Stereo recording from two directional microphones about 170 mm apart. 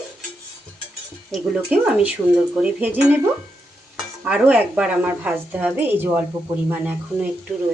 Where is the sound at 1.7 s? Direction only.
10° right (ahead or behind).